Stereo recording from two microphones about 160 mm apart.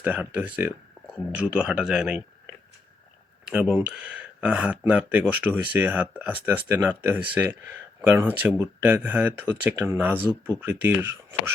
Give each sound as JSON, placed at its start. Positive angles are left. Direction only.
{"t": 0.0, "sound": "speech", "side_deg": -10}
{"t": 3.4, "sound": "speech", "side_deg": -10}